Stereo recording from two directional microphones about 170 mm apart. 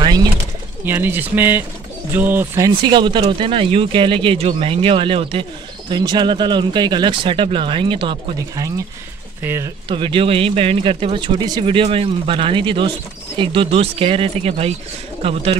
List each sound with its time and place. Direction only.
0.0 s pigeon: 25° right (ahead or behind)
0.8 s speech: 10° right (ahead or behind)
2.8 s speech: 30° right (ahead or behind)
9.8 s a man's voice: 30° right (ahead or behind)